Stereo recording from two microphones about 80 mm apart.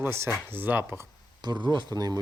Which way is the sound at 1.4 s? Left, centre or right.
Right.